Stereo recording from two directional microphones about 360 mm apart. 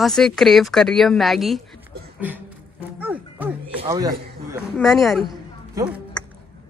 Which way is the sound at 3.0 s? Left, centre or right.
Centre.